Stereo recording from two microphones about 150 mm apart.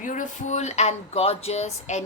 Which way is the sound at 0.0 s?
60° left (ahead or behind).